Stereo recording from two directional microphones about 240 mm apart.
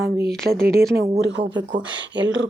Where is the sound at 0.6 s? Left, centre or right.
Right.